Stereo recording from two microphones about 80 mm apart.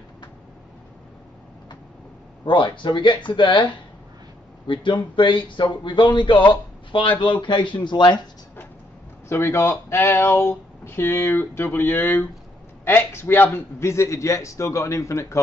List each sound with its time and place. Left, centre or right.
2.4 s speech: left
6.9 s speech: left
9.3 s a man's voice: left